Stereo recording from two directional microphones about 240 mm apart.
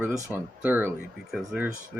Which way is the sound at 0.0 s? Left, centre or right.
Centre.